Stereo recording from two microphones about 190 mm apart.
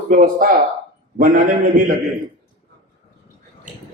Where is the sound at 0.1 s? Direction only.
45° right (ahead or behind).